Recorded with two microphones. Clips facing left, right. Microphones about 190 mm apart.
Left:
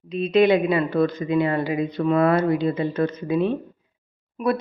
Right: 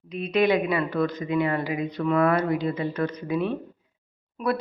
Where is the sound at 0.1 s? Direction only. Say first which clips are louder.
Left 5 dB; 25° left (ahead or behind).